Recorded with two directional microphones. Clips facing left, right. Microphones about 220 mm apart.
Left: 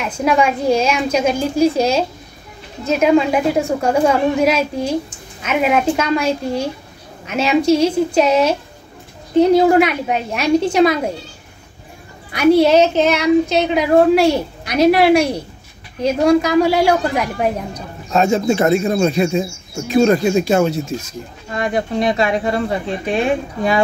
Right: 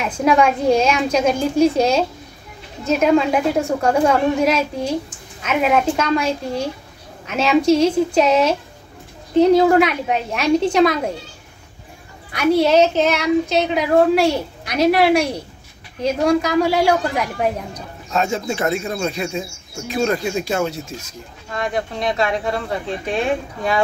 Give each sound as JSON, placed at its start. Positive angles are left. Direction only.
{"t": 0.0, "sound": "speech", "side_deg": 0}
{"t": 12.3, "sound": "speech", "side_deg": 0}
{"t": 16.4, "sound": "speech", "side_deg": 0}
{"t": 18.1, "sound": "speech", "side_deg": 35}
{"t": 21.5, "sound": "speech", "side_deg": 10}